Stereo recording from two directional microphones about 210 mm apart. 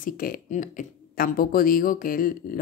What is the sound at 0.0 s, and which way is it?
Speech, 40° left (ahead or behind).